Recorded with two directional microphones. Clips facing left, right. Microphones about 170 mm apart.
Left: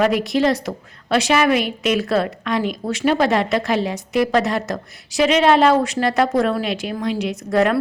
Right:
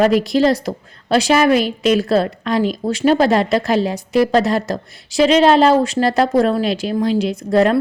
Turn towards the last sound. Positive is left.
turn(degrees=-30)  # may be behind; listen again after turning